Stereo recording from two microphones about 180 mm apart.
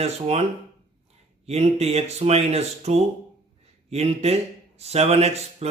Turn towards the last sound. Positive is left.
turn(degrees=-35)  # may be behind; listen again after turning